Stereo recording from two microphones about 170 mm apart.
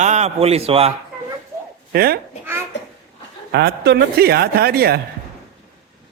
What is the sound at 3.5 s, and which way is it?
A man's voice, 80° right.